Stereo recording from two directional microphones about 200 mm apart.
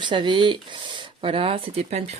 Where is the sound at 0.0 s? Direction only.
25° right (ahead or behind).